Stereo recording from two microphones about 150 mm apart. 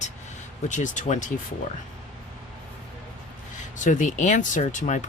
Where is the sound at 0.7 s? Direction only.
55° left (ahead or behind).